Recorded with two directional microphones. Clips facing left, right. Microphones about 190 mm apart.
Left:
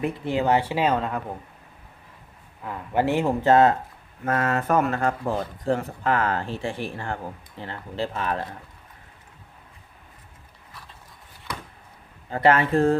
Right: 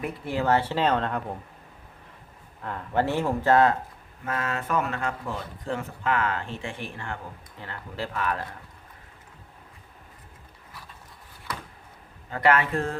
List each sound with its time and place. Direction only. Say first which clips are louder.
0.0 s speech: left 4 dB; 20° left (ahead or behind)
2.6 s speech: left 2 dB; 10° left (ahead or behind)
4.3 s speech: left 6 dB; 45° left (ahead or behind); by 8.5 s 25° left (ahead or behind)
12.3 s speech: left 3 dB; 30° left (ahead or behind)